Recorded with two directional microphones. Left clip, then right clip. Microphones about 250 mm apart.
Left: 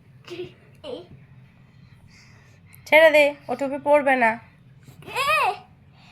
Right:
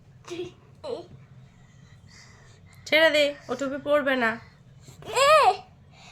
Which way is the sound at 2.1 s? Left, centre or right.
Right.